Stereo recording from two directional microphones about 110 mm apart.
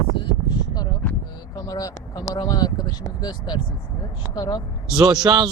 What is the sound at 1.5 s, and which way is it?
Speech, 35° left (ahead or behind).